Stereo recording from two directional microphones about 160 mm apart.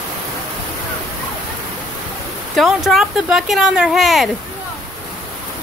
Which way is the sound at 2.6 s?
Centre (ahead or behind).